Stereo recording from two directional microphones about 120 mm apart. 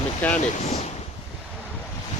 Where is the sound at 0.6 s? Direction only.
65° left (ahead or behind).